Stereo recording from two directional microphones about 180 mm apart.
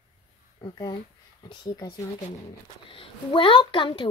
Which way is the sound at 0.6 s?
25° left (ahead or behind).